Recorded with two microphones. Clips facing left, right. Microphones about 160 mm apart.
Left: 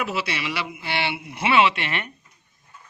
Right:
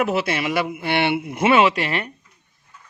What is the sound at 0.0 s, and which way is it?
Speech, 50° right (ahead or behind).